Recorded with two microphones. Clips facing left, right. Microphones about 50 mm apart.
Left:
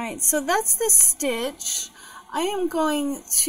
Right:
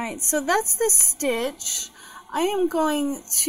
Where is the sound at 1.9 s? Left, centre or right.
Right.